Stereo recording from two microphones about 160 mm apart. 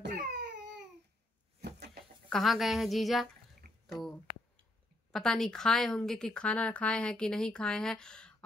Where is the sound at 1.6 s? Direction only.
85° right.